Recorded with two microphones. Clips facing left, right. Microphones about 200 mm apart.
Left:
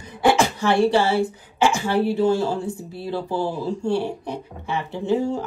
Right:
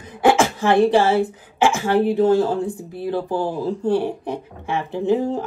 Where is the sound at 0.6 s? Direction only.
20° right (ahead or behind).